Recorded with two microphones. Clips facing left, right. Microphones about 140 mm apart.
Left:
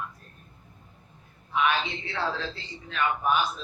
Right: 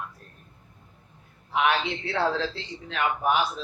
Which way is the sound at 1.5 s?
75° right (ahead or behind).